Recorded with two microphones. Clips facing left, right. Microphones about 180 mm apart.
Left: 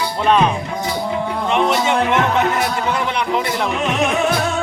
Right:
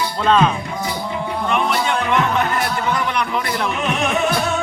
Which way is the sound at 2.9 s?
25° left (ahead or behind).